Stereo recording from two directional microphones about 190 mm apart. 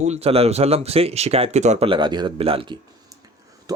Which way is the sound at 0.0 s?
35° right (ahead or behind).